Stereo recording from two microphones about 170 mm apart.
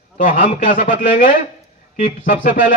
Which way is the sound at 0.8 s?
50° left (ahead or behind).